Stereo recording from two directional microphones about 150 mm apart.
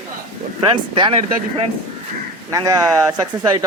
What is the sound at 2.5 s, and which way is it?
Speech, 25° right (ahead or behind).